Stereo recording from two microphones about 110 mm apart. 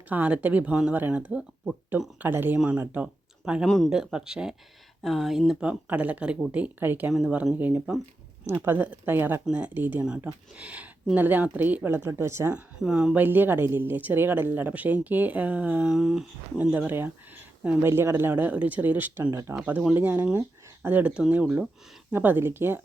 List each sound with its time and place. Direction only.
0.1 s a woman's voice: 10° right (ahead or behind)
7.1 s speech: centre (ahead or behind)
8.4 s a woman's voice: 20° right (ahead or behind)
12.5 s a woman's voice: 5° right (ahead or behind); by 19.5 s 25° right (ahead or behind)
19.6 s a woman's voice: 10° right (ahead or behind)